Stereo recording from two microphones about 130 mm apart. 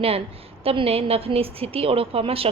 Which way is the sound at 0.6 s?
50° right (ahead or behind).